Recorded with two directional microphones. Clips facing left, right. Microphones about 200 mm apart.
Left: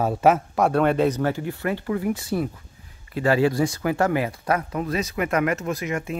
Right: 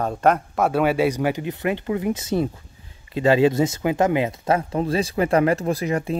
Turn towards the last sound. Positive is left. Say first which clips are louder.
# right 4 dB
turn(degrees=-35)  # may be behind; listen again after turning